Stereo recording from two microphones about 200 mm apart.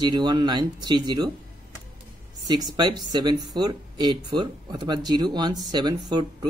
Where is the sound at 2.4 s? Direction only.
20° right (ahead or behind).